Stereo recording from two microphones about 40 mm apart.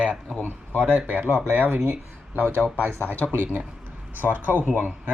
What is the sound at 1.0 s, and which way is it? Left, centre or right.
Speech, right.